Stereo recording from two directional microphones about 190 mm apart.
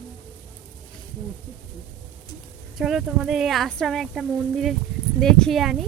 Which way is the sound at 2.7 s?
Centre (ahead or behind).